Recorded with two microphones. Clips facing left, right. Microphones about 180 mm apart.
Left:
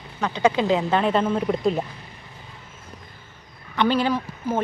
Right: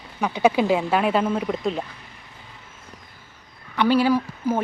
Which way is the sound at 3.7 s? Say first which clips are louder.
Right 3 dB; 10° right (ahead or behind).